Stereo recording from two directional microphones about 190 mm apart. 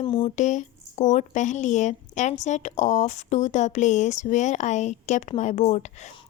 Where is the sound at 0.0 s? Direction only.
25° left (ahead or behind).